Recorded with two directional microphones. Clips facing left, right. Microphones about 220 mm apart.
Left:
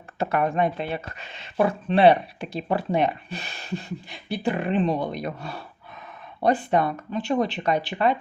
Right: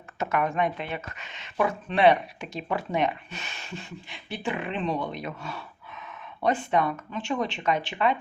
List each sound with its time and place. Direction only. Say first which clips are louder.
0.2 s speech: left 3 dB; 35° left (ahead or behind)